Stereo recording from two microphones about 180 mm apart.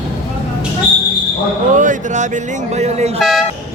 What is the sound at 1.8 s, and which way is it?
Speech, 45° right (ahead or behind).